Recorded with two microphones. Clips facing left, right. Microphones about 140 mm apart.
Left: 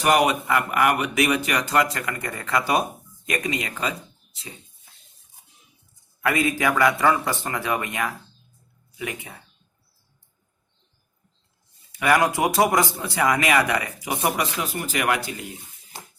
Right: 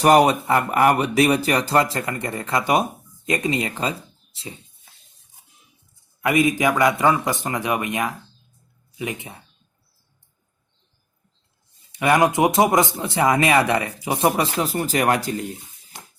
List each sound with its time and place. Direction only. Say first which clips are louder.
0.0 s speech: right 5 dB; 35° right (ahead or behind)
6.2 s a man's voice: right 4 dB; 20° right (ahead or behind)
11.9 s a man's voice: right 3 dB; 25° right (ahead or behind); by 15.4 s 40° right (ahead or behind)